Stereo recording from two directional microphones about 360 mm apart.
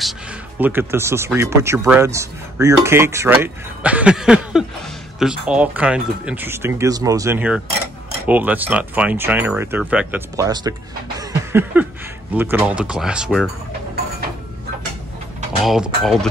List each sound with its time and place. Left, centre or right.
0.6 s speech: centre
11.1 s a sound: centre
12.4 s speech: centre
15.6 s speech: centre